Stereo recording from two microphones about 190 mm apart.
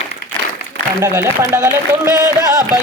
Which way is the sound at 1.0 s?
15° right (ahead or behind).